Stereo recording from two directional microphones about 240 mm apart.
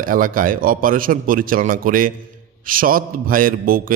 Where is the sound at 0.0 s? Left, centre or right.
Right.